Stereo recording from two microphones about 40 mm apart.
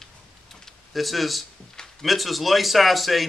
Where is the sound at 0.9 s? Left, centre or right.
Centre.